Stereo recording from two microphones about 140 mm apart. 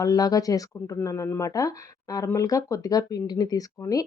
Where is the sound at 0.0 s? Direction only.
25° left (ahead or behind).